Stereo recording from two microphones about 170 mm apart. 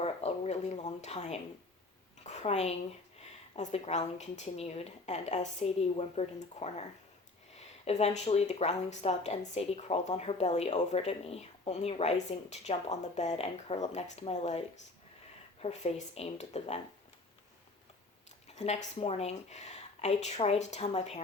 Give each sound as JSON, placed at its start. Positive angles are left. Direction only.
{"t": 0.0, "sound": "a woman's voice", "side_deg": 40}
{"t": 7.9, "sound": "a woman's voice", "side_deg": 40}
{"t": 15.6, "sound": "a woman's voice", "side_deg": 40}
{"t": 18.4, "sound": "a woman's voice", "side_deg": 40}